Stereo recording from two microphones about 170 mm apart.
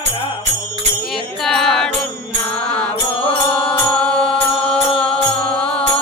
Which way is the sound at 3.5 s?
5° left (ahead or behind).